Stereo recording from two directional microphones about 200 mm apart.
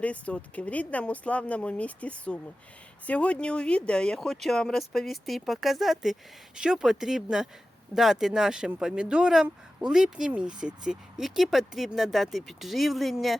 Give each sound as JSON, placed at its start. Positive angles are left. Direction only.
{"t": 0.0, "sound": "speech", "side_deg": 5}